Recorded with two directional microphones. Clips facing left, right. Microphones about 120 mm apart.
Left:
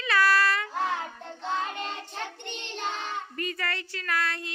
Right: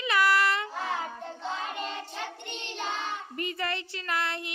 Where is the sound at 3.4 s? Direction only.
20° right (ahead or behind).